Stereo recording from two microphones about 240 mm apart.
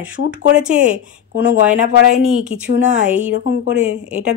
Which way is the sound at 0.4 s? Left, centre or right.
Right.